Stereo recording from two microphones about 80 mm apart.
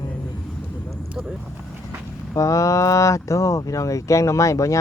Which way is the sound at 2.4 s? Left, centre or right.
Left.